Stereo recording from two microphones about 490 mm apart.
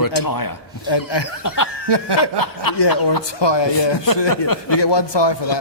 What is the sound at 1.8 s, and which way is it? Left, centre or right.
Snicker, right.